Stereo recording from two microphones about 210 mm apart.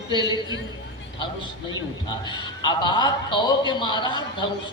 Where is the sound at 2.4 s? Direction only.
20° left (ahead or behind).